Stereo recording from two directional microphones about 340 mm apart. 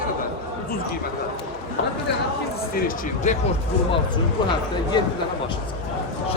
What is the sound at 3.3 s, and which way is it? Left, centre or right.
Speech, left.